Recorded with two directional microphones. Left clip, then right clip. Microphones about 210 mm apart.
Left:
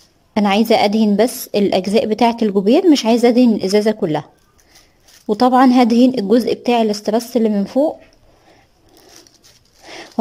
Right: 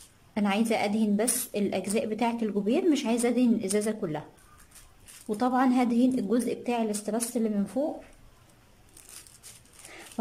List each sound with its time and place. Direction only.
0.3 s a woman's voice: 40° left (ahead or behind)
5.2 s a woman's voice: 35° left (ahead or behind)